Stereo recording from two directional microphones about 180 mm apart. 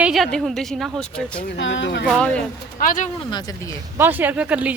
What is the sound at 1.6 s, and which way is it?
Speech, 85° left.